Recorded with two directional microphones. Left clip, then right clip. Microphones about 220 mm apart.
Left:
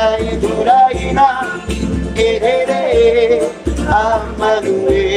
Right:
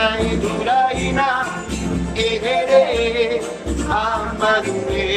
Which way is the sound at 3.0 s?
30° left (ahead or behind).